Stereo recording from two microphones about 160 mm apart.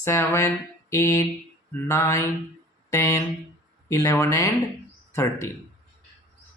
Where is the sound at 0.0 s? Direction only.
15° left (ahead or behind).